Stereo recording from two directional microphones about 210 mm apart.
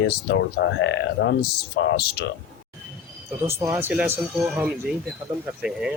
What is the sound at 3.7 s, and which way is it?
A man's voice, 10° right (ahead or behind).